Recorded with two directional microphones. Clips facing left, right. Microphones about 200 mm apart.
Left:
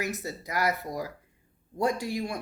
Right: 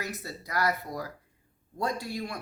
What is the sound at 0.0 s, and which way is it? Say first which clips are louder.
Speech: left 4 dB; 20° left (ahead or behind).